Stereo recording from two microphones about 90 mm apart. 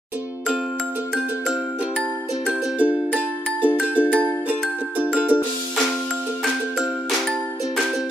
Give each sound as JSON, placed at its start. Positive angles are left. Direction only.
{"t": 1.1, "sound": "music", "side_deg": 0}
{"t": 2.4, "sound": "music", "side_deg": -15}